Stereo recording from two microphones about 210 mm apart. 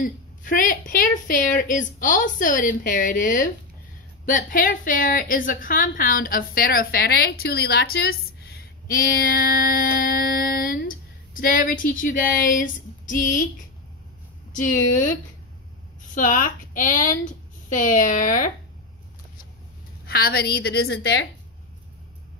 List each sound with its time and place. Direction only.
0.0 s a woman's voice: 40° left (ahead or behind)
14.5 s a woman's voice: 40° left (ahead or behind)
16.2 s a woman's voice: 40° left (ahead or behind)
20.1 s a woman's voice: 45° left (ahead or behind)